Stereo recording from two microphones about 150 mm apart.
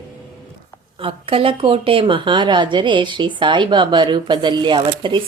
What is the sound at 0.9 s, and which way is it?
Speech, 35° right (ahead or behind).